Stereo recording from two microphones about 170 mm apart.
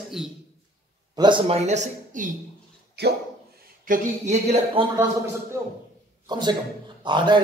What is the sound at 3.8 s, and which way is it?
Speech, 40° right (ahead or behind).